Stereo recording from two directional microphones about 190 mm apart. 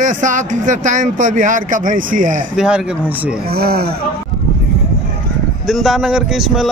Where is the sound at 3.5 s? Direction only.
55° right (ahead or behind).